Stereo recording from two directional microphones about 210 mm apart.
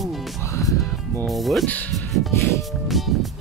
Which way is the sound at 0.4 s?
15° left (ahead or behind).